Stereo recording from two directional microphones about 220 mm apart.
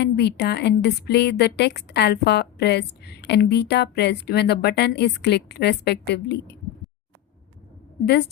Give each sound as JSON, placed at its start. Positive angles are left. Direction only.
{"t": 0.0, "sound": "a woman's voice", "side_deg": 50}